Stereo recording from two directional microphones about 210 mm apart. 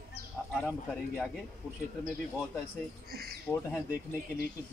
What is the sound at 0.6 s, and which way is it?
Speech, 5° left (ahead or behind).